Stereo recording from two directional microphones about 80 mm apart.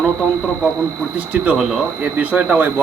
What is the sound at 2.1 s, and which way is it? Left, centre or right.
Speech, centre.